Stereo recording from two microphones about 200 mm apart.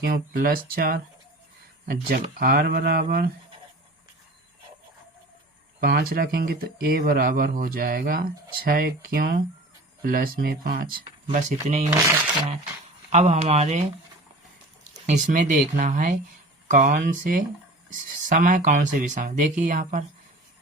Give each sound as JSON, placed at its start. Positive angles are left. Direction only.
{"t": 0.0, "sound": "speech", "side_deg": -45}
{"t": 5.8, "sound": "speech", "side_deg": -50}
{"t": 11.3, "sound": "speech", "side_deg": -35}
{"t": 13.1, "sound": "speech", "side_deg": -35}
{"t": 15.0, "sound": "speech", "side_deg": -40}